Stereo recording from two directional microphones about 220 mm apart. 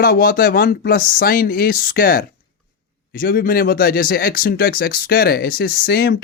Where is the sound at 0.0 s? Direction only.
40° left (ahead or behind).